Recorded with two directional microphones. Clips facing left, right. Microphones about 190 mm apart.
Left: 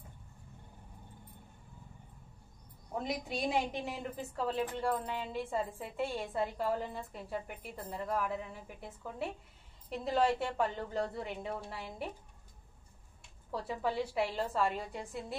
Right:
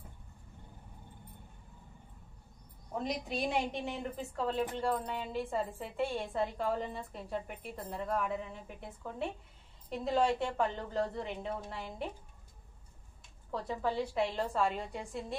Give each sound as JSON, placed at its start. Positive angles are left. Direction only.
{"t": 3.0, "sound": "a woman's voice", "side_deg": 0}
{"t": 13.5, "sound": "a woman's voice", "side_deg": 10}